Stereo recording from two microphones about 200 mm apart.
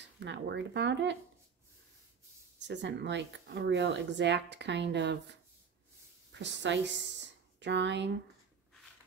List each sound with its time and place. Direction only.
0.2 s speech: 60° right (ahead or behind)
2.6 s speech: 60° right (ahead or behind)
6.3 s a woman's voice: 65° right (ahead or behind)